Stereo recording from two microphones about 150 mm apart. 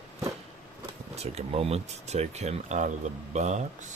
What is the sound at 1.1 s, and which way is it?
Speech, 45° right (ahead or behind).